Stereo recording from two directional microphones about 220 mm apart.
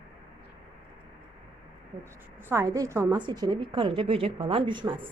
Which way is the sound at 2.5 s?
15° right (ahead or behind).